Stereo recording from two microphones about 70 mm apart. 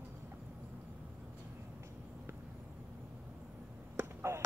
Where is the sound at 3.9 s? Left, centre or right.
Right.